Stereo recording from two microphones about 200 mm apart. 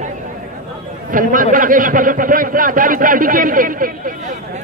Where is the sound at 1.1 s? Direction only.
40° right (ahead or behind).